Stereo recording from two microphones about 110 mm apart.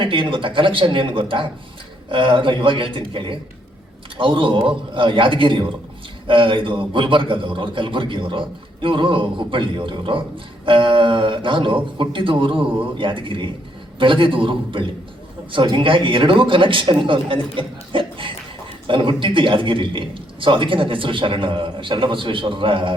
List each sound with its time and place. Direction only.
0.0 s a man's voice: 50° right (ahead or behind)